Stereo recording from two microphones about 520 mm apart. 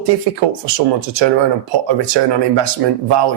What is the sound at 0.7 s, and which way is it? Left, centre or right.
Speech, right.